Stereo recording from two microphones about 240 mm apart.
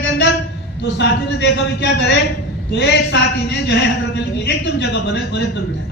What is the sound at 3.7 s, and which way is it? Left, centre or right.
A woman's voice, left.